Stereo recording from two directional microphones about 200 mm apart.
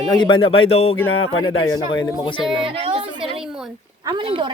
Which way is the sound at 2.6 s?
25° right (ahead or behind).